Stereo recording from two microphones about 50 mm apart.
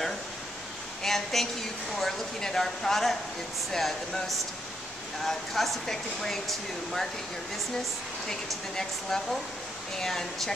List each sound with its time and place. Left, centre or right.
1.0 s a woman's voice: centre
8.3 s speech: centre